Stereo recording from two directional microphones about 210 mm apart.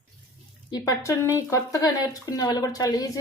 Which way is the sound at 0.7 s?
15° left (ahead or behind).